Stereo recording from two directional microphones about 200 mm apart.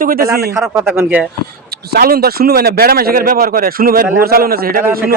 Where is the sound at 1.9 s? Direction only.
50° right (ahead or behind).